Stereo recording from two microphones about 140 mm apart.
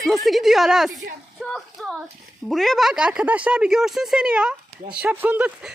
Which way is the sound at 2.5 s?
Centre (ahead or behind).